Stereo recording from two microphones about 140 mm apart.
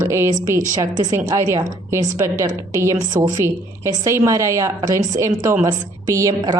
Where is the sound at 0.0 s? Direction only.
20° right (ahead or behind).